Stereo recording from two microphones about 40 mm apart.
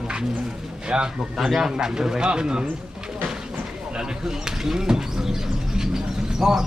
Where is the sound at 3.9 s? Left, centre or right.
Centre.